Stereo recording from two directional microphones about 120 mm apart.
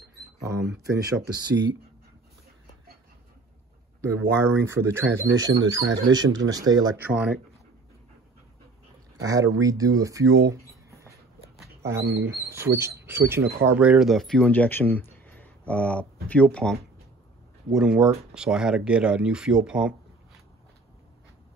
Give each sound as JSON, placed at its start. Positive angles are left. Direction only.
{"t": 4.0, "sound": "speech", "side_deg": -25}
{"t": 7.0, "sound": "speech", "side_deg": -15}
{"t": 9.2, "sound": "speech", "side_deg": -30}
{"t": 13.8, "sound": "speech", "side_deg": 0}
{"t": 17.6, "sound": "speech", "side_deg": -5}